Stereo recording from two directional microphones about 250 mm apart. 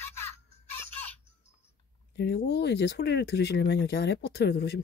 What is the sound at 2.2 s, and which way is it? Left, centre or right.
Speech, left.